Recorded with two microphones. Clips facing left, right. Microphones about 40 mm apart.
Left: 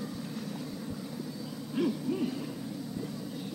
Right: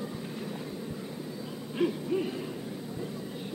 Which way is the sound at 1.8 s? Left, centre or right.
Right.